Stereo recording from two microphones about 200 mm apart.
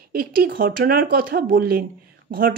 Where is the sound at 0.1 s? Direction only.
45° right (ahead or behind).